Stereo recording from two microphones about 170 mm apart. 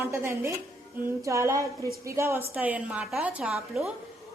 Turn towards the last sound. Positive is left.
turn(degrees=-5)  # may be behind; listen again after turning